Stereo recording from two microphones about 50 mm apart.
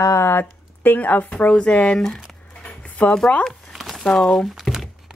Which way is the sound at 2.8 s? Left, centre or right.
Left.